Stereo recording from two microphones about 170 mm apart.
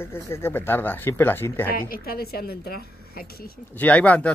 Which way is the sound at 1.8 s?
60° left (ahead or behind).